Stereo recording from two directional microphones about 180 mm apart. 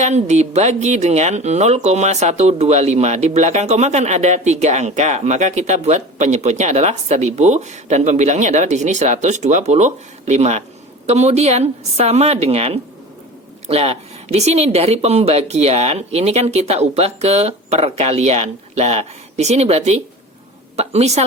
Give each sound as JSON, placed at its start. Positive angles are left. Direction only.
{"t": 0.0, "sound": "speech", "side_deg": -40}